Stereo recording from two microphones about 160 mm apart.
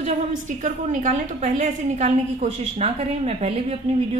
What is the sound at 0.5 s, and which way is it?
A woman's voice, 50° right (ahead or behind).